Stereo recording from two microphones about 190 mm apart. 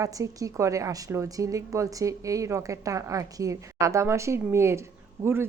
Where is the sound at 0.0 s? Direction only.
15° right (ahead or behind).